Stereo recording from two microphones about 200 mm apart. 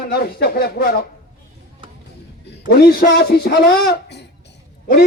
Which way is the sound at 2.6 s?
50° left (ahead or behind).